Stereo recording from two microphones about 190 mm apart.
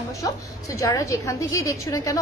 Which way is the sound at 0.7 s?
15° left (ahead or behind).